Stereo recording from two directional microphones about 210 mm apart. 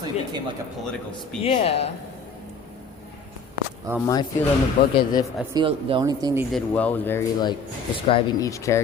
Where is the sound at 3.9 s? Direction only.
15° right (ahead or behind).